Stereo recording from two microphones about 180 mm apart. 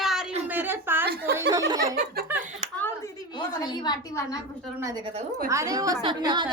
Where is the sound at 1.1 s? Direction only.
65° right (ahead or behind).